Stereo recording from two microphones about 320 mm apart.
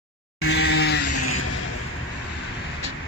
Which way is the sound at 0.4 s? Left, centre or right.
Left.